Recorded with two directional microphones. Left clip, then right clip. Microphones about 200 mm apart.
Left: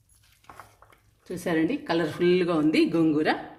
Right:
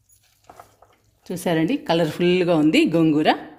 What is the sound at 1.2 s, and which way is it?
A woman's voice, 45° right (ahead or behind).